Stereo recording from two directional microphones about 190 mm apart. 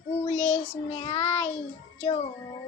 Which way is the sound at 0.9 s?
30° left (ahead or behind).